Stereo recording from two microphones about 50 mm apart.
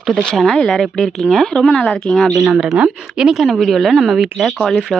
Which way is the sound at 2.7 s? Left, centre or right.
Centre.